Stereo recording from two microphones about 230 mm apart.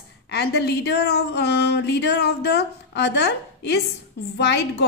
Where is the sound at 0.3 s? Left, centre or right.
Left.